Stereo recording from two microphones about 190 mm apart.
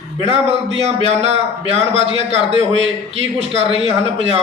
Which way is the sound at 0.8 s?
35° right (ahead or behind).